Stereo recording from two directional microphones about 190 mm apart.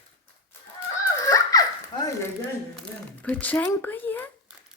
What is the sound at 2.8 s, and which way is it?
Speech, 10° left (ahead or behind).